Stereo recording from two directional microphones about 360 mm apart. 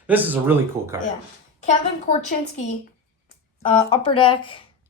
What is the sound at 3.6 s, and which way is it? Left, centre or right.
Speech, centre.